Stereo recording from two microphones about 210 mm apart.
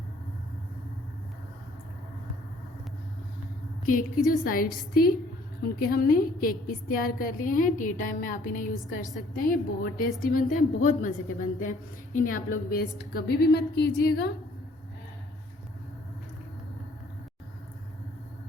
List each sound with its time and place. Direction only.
3.8 s a woman's voice: 40° left (ahead or behind)
5.9 s a woman's voice: 45° left (ahead or behind)